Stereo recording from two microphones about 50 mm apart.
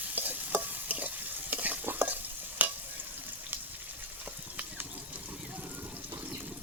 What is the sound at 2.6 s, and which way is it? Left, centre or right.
Stir, right.